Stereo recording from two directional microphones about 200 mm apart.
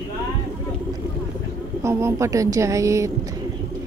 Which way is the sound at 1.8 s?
15° right (ahead or behind).